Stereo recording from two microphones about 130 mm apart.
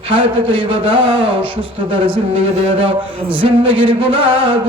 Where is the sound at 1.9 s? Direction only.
45° right (ahead or behind).